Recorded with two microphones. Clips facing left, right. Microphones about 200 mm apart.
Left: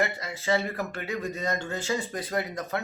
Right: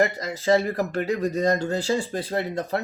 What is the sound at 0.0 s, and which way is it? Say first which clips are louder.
Speech: right 6 dB; 35° right (ahead or behind).